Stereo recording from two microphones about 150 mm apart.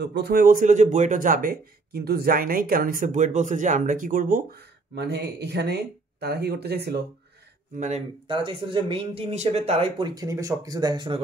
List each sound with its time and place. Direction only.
0.2 s speech: 85° right
8.3 s speech: 35° right (ahead or behind)